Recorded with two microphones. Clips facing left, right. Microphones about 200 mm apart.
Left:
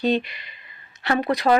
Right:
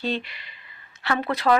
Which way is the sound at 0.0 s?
15° left (ahead or behind).